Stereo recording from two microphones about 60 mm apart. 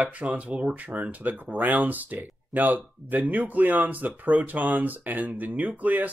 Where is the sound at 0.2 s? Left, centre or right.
Right.